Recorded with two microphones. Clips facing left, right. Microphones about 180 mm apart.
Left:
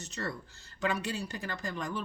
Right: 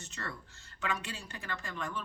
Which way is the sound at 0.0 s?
40° left (ahead or behind).